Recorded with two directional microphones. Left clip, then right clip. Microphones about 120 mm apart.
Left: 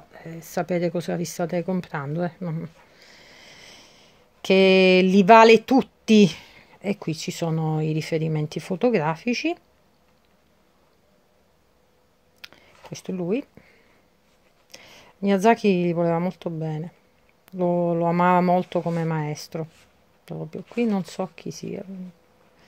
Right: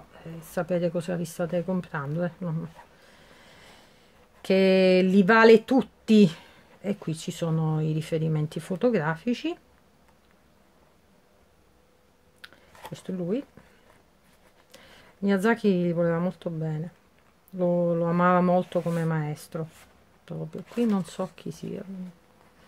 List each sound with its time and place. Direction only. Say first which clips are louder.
0.1 s speech: left 3 dB; 35° left (ahead or behind)
12.9 s speech: left 4 dB; 30° left (ahead or behind)
14.7 s speech: left 5 dB; 30° left (ahead or behind)